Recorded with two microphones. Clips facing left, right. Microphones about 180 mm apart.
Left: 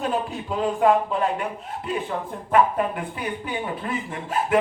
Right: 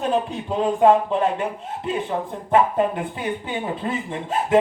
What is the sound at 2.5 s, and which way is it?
Speech, 25° right (ahead or behind).